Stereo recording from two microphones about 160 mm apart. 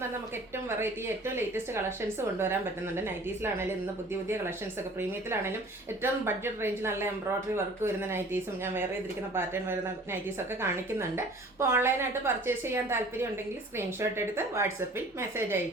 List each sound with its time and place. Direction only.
0.5 s a woman's voice: 15° right (ahead or behind)
4.9 s a woman's voice: 15° right (ahead or behind)